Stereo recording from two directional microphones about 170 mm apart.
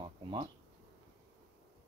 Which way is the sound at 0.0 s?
30° right (ahead or behind).